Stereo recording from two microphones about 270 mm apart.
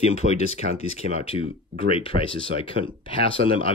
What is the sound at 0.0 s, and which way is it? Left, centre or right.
Speech, left.